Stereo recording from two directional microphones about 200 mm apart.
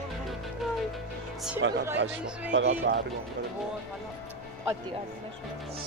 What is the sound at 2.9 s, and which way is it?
Speech, 45° right (ahead or behind).